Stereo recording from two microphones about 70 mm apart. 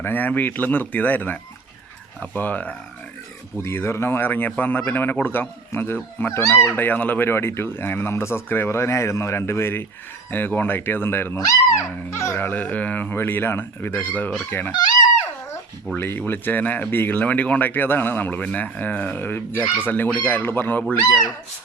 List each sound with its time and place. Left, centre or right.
0.0 s speech: left
3.6 s speech: left
6.7 s speech: left
10.3 s speech: left
11.3 s speech: left
12.1 s speech: left
12.5 s speech: left
16.0 s speech: left